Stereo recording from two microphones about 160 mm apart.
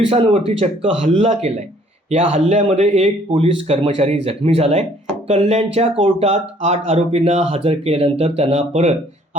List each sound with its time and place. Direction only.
0.1 s speech: 35° right (ahead or behind)
1.0 s speech: 45° right (ahead or behind)